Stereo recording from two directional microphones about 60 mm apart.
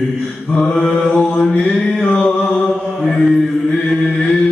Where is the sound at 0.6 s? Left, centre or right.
Centre.